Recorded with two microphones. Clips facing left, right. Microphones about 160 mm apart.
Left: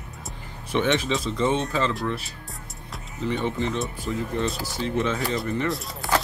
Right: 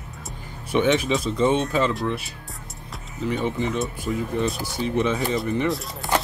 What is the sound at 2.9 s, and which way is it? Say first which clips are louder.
Music: right 1 dB; centre (ahead or behind).